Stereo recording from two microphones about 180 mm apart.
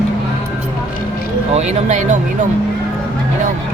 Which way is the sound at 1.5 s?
40° right (ahead or behind).